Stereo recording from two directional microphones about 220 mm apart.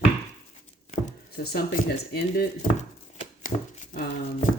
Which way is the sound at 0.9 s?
40° left (ahead or behind).